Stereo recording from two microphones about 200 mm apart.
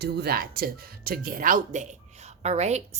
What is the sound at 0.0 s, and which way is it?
Speech, 50° right (ahead or behind).